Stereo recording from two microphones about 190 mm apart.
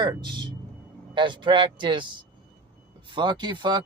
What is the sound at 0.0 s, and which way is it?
Speech, 25° right (ahead or behind).